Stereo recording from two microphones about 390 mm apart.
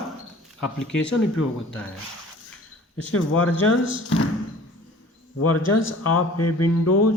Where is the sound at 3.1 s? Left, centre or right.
Left.